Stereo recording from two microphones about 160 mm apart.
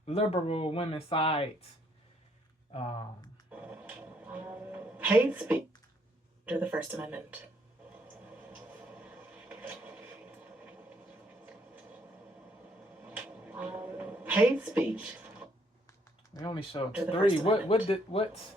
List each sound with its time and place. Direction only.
0.0 s speech: 40° left (ahead or behind)
2.7 s speech: 40° left (ahead or behind)
3.5 s music: 10° right (ahead or behind)
6.4 s speech: 10° right (ahead or behind)
7.9 s rub: 10° right (ahead or behind)
13.0 s a sound: 10° right (ahead or behind)
15.9 s typing: 20° left (ahead or behind)
17.1 s speech: 35° left (ahead or behind)